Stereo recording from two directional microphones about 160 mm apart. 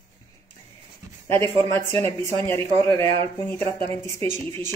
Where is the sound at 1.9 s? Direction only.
40° right (ahead or behind).